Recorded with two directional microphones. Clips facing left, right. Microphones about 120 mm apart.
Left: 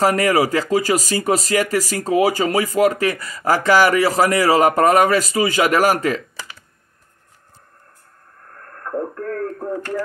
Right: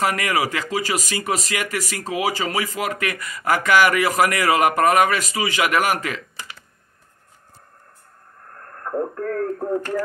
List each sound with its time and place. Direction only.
0.0 s speech: 35° left (ahead or behind)
9.1 s radio: 25° right (ahead or behind)